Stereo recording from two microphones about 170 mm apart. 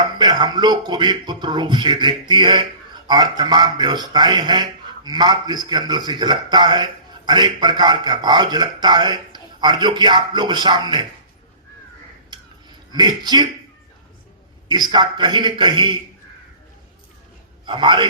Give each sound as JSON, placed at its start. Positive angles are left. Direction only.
{"t": 0.0, "sound": "speech", "side_deg": -25}
{"t": 12.9, "sound": "speech", "side_deg": -25}
{"t": 14.7, "sound": "speech", "side_deg": -25}
{"t": 17.7, "sound": "speech", "side_deg": -30}